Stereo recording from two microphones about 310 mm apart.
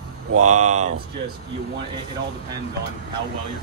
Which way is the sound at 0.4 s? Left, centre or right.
Right.